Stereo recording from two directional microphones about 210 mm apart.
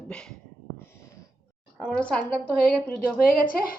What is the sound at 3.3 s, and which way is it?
Speech, 40° left (ahead or behind).